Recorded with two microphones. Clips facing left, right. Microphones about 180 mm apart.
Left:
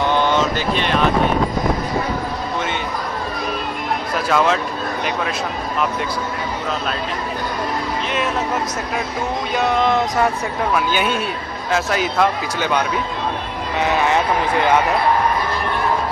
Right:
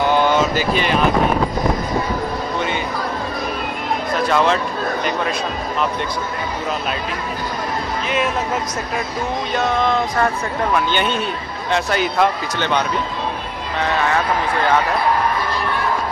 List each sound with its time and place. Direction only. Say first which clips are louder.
0.1 s a sound: right 2 dB; 5° right (ahead or behind)
4.3 s a man's voice: even; centre (ahead or behind)
9.5 s a man's voice: left 1 dB; 15° left (ahead or behind)
14.0 s speech: left 1 dB; 15° left (ahead or behind)